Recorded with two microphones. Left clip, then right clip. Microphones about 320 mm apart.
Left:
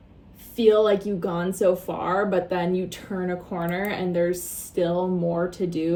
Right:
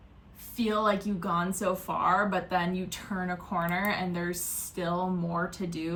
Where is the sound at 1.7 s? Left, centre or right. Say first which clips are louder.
Left 3 dB; centre.